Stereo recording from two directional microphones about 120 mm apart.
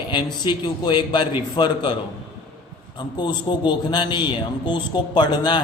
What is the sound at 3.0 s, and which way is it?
A man's voice, 40° left (ahead or behind).